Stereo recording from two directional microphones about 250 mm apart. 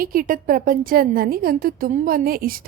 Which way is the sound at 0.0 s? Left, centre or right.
Right.